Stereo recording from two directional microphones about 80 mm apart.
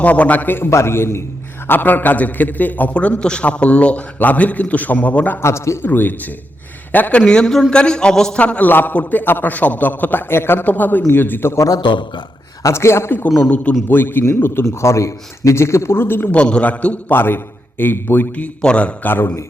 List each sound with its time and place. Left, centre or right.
0.0 s a man's voice: centre
5.4 s a man's voice: left
5.8 s a man's voice: left
11.8 s a man's voice: left
12.6 s a man's voice: left
14.6 s a man's voice: left
16.3 s a man's voice: centre